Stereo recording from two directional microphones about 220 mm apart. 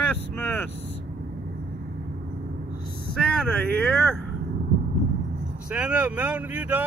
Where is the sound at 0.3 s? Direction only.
10° left (ahead or behind).